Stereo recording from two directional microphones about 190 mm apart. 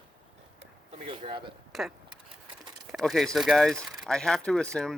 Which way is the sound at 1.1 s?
25° right (ahead or behind).